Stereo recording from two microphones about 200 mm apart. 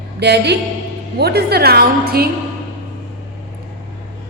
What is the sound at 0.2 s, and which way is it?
A man's voice, 55° right (ahead or behind).